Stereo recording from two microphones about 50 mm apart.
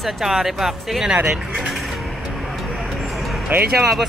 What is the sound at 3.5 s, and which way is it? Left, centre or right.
Speech, right.